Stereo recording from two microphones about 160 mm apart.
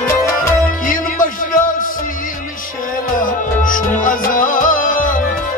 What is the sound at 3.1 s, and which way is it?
Music, 60° left (ahead or behind).